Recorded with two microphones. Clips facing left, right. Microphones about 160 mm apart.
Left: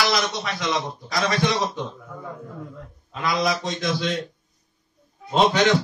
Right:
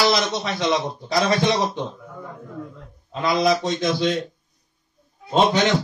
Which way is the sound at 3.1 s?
25° right (ahead or behind).